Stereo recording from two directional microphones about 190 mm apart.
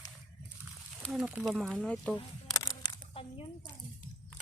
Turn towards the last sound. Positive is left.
turn(degrees=25)  # may be behind; listen again after turning